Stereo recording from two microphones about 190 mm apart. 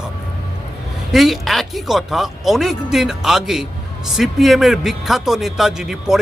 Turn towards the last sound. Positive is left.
turn(degrees=-5)  # may be behind; listen again after turning